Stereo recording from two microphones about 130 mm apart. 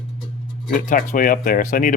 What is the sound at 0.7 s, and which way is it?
Speech, 80° left.